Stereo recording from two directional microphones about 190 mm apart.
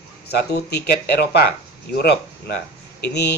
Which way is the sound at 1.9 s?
55° left (ahead or behind).